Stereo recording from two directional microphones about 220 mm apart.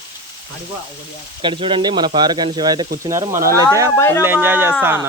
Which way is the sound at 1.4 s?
20° right (ahead or behind).